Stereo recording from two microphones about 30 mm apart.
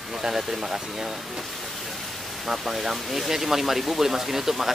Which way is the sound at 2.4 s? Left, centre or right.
Centre.